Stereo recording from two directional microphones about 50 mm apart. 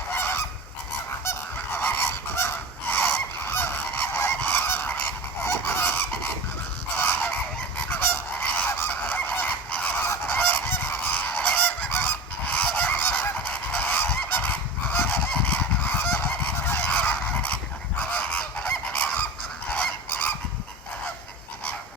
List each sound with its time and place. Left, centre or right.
0.1 s goose: left
1.2 s goose: left
1.8 s goose: left
2.9 s goose: left
6.9 s fowl: left
7.8 s goose: left
12.9 s goose: left
13.9 s goose: left
16.9 s goose: left